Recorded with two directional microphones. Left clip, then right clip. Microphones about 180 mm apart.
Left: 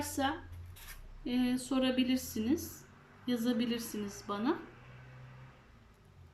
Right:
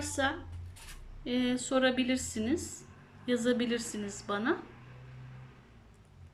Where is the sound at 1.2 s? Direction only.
20° left (ahead or behind).